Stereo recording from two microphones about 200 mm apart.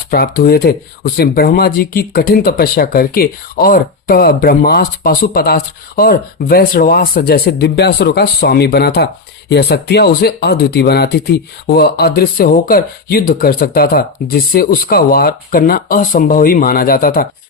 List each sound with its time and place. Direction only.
0.1 s speech: 50° left (ahead or behind)